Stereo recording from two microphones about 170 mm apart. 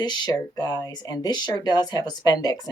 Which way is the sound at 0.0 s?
25° left (ahead or behind).